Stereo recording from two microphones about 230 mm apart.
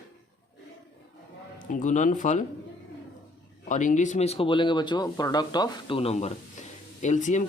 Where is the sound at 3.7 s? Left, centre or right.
Left.